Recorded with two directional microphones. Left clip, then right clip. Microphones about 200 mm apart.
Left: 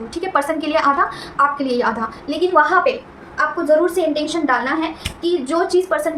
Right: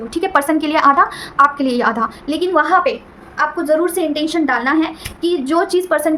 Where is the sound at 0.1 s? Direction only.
50° right (ahead or behind).